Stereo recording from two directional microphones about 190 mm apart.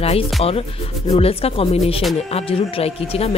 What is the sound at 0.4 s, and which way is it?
Speech, 30° left (ahead or behind).